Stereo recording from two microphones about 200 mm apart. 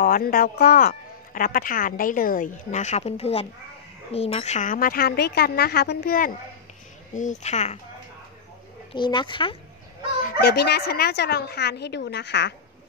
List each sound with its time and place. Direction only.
0.0 s a man's voice: 45° left (ahead or behind)
7.2 s speech: 35° left (ahead or behind)
8.9 s speech: 25° left (ahead or behind)
10.2 s speech: 55° left (ahead or behind)